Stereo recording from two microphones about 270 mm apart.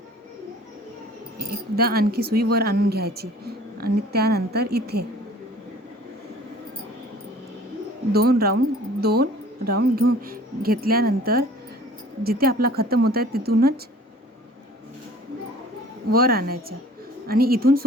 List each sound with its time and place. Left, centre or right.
1.4 s speech: right
8.1 s speech: right
16.1 s speech: right